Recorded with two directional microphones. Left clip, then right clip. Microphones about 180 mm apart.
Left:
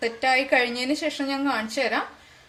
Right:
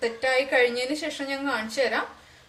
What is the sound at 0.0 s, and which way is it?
Speech, 45° left (ahead or behind).